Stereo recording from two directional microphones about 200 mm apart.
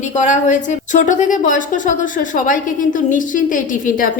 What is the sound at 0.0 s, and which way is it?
A woman's voice, 35° left (ahead or behind).